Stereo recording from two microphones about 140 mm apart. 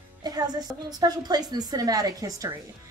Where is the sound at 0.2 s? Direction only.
30° right (ahead or behind).